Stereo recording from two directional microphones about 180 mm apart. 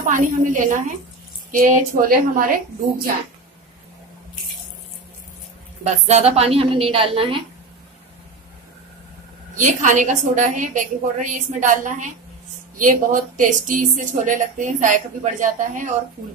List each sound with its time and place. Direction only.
0.1 s speech: 45° right (ahead or behind)
6.0 s a woman's voice: 35° right (ahead or behind)
9.6 s speech: 45° right (ahead or behind)